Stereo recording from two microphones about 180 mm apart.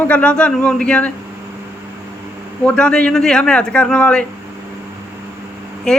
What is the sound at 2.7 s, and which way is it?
A man's voice, 5° left (ahead or behind).